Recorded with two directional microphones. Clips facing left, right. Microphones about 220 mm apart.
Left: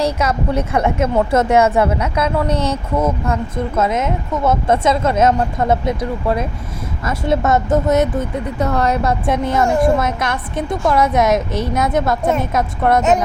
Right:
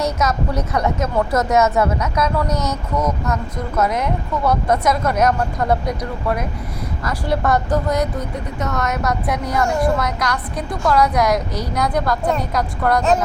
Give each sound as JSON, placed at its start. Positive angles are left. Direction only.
{"t": 0.0, "sound": "a woman's voice", "side_deg": 30}